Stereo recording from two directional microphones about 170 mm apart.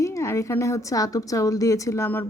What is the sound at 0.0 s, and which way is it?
A woman's voice, 15° left (ahead or behind).